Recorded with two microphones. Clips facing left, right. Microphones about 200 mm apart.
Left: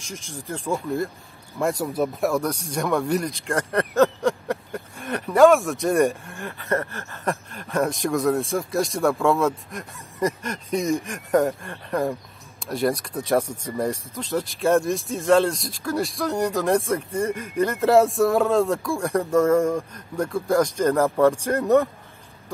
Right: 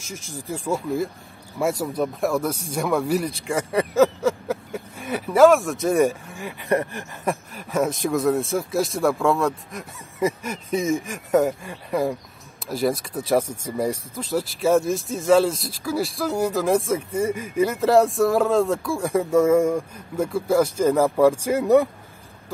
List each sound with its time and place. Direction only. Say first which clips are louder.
0.5 s speech: right 1 dB; centre (ahead or behind)
6.6 s a sound: right 3 dB; 15° right (ahead or behind)
7.5 s speech: even; 5° right (ahead or behind)